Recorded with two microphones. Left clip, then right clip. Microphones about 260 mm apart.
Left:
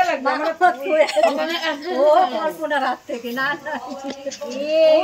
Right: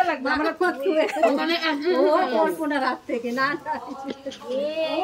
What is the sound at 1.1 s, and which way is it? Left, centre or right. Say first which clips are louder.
Speech: left 3 dB; centre.